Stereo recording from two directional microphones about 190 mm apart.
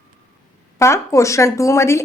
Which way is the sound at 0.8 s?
15° left (ahead or behind).